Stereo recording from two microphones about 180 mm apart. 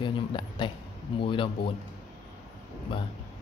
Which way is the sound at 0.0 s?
25° left (ahead or behind).